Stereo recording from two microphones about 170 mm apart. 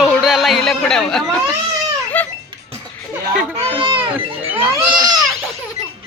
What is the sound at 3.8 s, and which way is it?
Speech, 30° right (ahead or behind).